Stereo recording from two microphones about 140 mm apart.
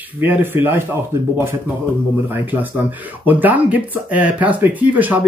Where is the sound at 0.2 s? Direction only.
15° right (ahead or behind).